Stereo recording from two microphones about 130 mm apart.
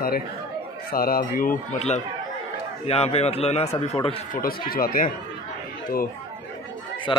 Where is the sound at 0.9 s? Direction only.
90° left.